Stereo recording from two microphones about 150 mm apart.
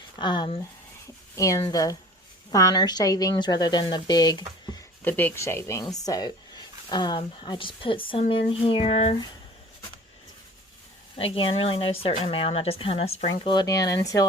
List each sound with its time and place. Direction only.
0.2 s speech: 30° left (ahead or behind)
1.4 s speech: 20° left (ahead or behind)
5.0 s speech: 10° left (ahead or behind); by 9.1 s 40° left (ahead or behind)
11.2 s speech: 40° left (ahead or behind)
13.5 s speech: 25° left (ahead or behind)